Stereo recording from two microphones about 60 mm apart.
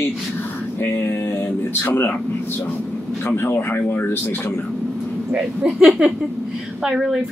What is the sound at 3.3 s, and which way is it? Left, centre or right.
Speech, left.